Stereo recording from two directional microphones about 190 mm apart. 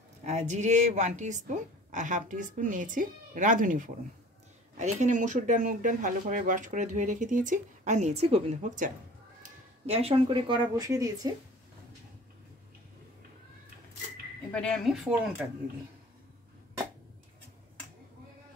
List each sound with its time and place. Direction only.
0.2 s a woman's voice: 40° right (ahead or behind); by 11.3 s 15° right (ahead or behind)
14.5 s speech: 5° left (ahead or behind)